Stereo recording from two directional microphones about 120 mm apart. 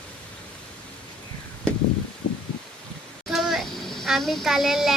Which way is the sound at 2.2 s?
90° left.